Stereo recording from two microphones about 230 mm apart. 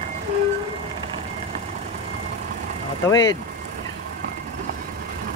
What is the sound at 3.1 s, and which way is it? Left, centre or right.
Speech, centre.